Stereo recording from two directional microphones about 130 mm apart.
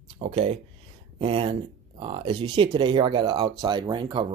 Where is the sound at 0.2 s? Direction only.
50° right (ahead or behind).